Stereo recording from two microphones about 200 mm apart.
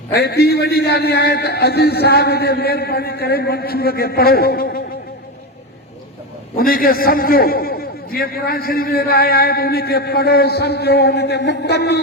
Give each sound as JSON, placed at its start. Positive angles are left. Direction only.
{"t": 0.1, "sound": "a man's voice", "side_deg": 55}
{"t": 6.6, "sound": "a man's voice", "side_deg": 45}